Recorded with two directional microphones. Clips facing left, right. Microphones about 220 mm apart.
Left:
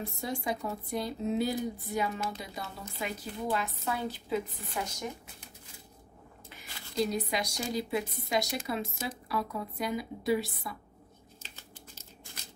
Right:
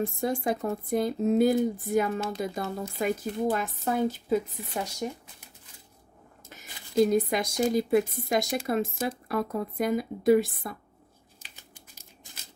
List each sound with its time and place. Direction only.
0.0 s speech: 50° right (ahead or behind)
6.5 s speech: 50° right (ahead or behind)
11.5 s crumpling: 10° right (ahead or behind)